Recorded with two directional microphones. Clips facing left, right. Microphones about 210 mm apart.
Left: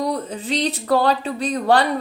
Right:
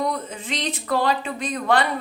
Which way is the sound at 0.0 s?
35° left (ahead or behind).